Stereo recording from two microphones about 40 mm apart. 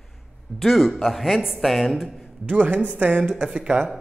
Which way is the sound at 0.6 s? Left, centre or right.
Centre.